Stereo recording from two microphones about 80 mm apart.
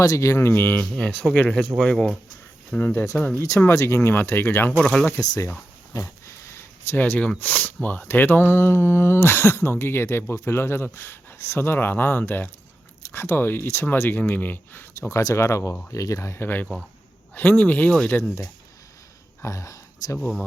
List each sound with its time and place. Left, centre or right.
0.0 s speech: left; by 2.1 s centre
2.7 s speech: left
3.3 s speech: left
4.8 s speech: centre
5.9 s a sound: left
6.9 s speech: left
15.1 s speech: left; by 18.3 s centre
19.4 s a sound: left